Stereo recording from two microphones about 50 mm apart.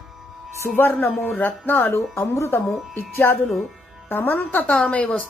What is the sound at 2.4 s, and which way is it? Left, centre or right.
A woman's voice, left.